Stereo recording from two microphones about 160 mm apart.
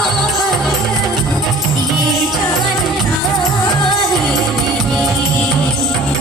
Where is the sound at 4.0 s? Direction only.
Centre (ahead or behind).